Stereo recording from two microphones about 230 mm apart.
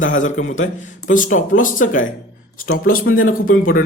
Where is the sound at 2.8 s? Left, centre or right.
Left.